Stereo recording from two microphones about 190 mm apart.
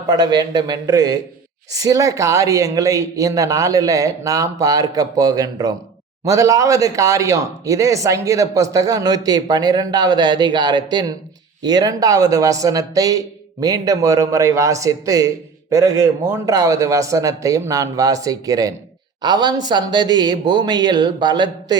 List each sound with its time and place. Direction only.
0.1 s speech: 20° right (ahead or behind)